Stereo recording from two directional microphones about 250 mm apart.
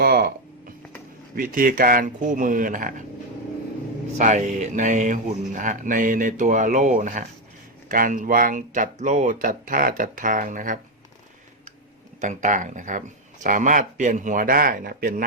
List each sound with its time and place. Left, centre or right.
0.0 s speech: right
1.4 s speech: right
4.2 s speech: right
12.2 s speech: right